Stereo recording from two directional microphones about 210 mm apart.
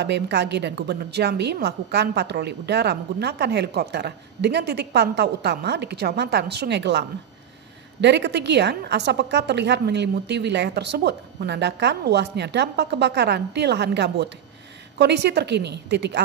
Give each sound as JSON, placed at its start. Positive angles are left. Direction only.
{"t": 0.0, "sound": "a woman's voice", "side_deg": -55}